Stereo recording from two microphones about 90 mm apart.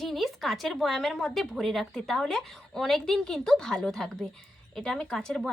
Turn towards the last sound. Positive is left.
turn(degrees=5)  # may be behind; listen again after turning